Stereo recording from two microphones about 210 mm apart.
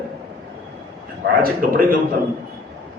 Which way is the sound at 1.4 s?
45° right (ahead or behind).